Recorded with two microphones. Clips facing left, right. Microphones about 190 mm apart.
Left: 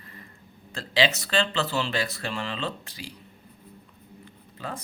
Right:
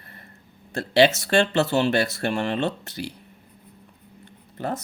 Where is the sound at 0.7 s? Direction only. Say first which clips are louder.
Right 7 dB; 65° right (ahead or behind).